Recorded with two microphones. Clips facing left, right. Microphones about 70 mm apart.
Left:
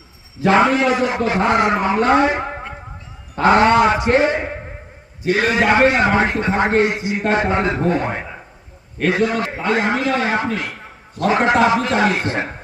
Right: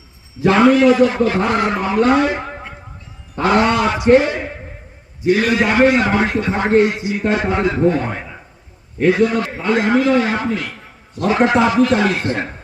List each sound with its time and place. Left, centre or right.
0.4 s a man's voice: left
3.4 s a man's voice: left